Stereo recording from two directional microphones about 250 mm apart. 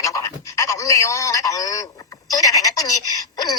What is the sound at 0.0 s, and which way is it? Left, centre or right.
Pant, centre.